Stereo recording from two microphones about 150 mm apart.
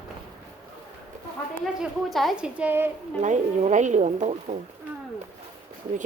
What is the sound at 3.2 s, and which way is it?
Speech, 55° right (ahead or behind).